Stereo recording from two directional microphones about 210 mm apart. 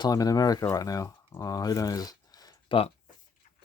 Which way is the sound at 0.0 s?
15° left (ahead or behind).